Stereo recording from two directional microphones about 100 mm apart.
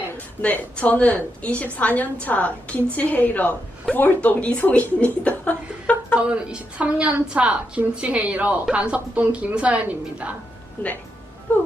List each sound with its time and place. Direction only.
0.4 s a woman's voice: 15° left (ahead or behind)
6.1 s a woman's voice: 10° right (ahead or behind)
10.8 s speech: 20° left (ahead or behind)